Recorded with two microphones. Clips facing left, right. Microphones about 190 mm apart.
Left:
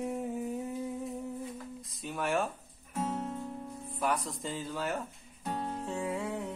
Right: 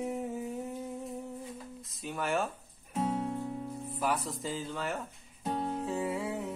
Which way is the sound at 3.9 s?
Centre (ahead or behind).